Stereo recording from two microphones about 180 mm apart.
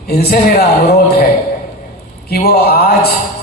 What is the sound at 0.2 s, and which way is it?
Speech, 60° left (ahead or behind).